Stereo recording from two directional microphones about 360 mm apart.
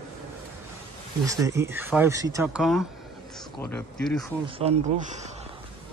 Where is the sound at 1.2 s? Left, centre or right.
Centre.